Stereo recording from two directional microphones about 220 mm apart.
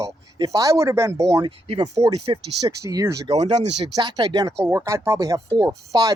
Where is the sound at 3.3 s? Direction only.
30° right (ahead or behind).